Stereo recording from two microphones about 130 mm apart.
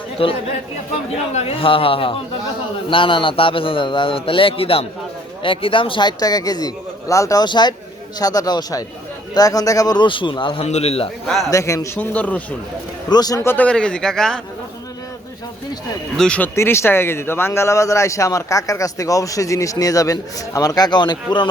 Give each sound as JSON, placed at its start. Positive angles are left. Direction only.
{"t": 0.2, "sound": "a man's voice", "side_deg": 45}
{"t": 1.3, "sound": "a man's voice", "side_deg": 60}
{"t": 1.6, "sound": "a man's voice", "side_deg": 45}
{"t": 7.4, "sound": "a man's voice", "side_deg": 35}
{"t": 10.7, "sound": "a man's voice", "side_deg": 55}
{"t": 11.5, "sound": "speech", "side_deg": 25}
{"t": 11.9, "sound": "a man's voice", "side_deg": 10}
{"t": 13.1, "sound": "a man's voice", "side_deg": 30}
{"t": 16.1, "sound": "a man's voice", "side_deg": 5}
{"t": 16.6, "sound": "speech", "side_deg": 20}